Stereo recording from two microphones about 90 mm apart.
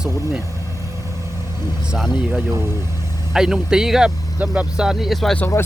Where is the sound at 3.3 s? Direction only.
5° right (ahead or behind).